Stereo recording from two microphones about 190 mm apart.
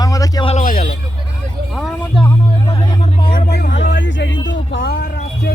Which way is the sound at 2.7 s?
30° left (ahead or behind).